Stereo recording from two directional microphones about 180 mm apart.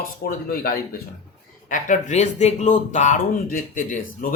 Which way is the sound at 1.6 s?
45° left (ahead or behind).